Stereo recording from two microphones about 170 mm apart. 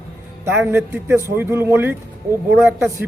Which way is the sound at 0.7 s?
15° right (ahead or behind).